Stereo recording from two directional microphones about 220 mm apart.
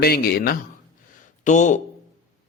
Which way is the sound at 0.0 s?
45° left (ahead or behind).